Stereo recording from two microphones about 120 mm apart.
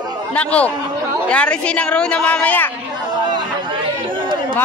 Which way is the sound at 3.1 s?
40° right (ahead or behind).